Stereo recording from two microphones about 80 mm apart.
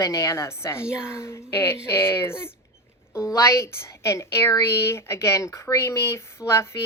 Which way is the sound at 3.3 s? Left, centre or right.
Left.